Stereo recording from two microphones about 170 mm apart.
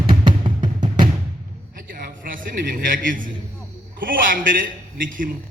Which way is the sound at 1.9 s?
60° right (ahead or behind).